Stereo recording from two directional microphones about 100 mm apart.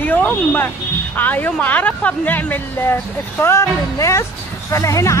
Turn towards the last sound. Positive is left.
turn(degrees=30)  # may be behind; listen again after turning